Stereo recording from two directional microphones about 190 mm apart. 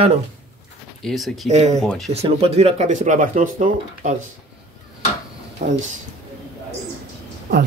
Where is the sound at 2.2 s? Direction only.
30° right (ahead or behind).